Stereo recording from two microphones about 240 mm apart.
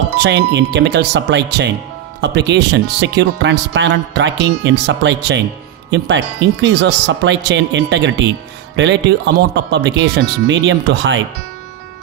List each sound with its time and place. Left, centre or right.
0.2 s speech: right